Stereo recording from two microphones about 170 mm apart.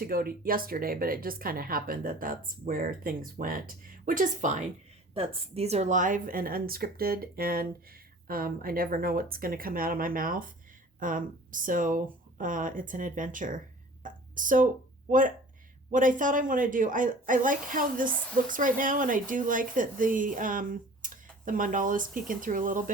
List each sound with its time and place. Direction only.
0.0 s a woman's voice: 60° right (ahead or behind)
5.1 s a woman's voice: 35° right (ahead or behind); by 14.7 s 50° right (ahead or behind)
15.9 s speech: 50° right (ahead or behind)